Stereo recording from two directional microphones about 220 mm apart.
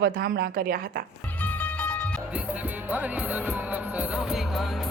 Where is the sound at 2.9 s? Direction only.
5° right (ahead or behind).